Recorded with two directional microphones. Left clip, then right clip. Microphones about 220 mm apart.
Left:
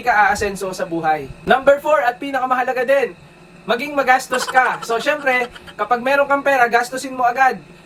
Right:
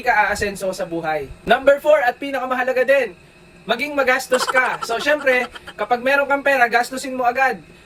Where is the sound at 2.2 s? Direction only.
15° left (ahead or behind).